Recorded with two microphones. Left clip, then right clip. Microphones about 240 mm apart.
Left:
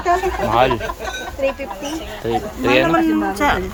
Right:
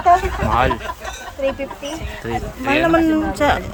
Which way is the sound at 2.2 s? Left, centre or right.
Centre.